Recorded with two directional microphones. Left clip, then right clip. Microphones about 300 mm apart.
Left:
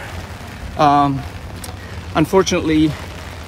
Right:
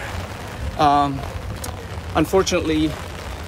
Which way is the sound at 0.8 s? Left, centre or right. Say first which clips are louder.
Left 3 dB; centre.